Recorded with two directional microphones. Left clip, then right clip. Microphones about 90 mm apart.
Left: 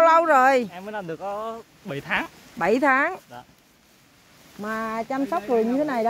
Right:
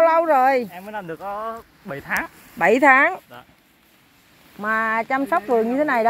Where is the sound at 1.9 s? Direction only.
90° left.